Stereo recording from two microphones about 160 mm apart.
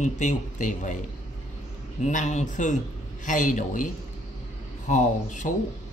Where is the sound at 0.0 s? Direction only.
50° left (ahead or behind).